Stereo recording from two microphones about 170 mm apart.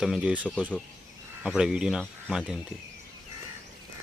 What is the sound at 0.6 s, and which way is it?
Speech, 5° left (ahead or behind).